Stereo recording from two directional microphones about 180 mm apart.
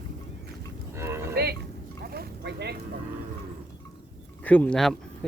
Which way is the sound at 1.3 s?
60° right (ahead or behind).